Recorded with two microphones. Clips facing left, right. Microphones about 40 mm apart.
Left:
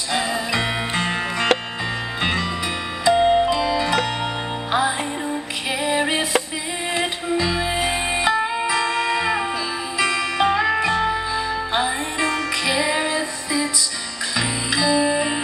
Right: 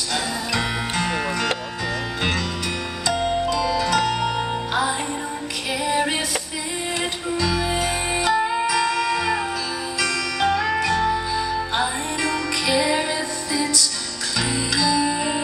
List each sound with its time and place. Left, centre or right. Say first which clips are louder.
0.1 s music: left 3 dB; left
3.1 s music: left 6 dB; left
5.9 s music: left 1 dB; centre